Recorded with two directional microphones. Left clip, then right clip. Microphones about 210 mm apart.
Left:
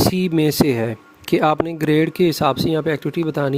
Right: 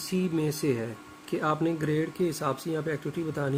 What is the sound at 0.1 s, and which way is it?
Speech, 50° left (ahead or behind).